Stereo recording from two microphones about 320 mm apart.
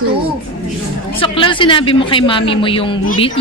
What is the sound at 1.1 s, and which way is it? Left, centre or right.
Speech, centre.